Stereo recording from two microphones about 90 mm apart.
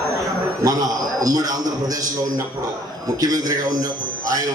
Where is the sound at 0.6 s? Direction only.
45° right (ahead or behind).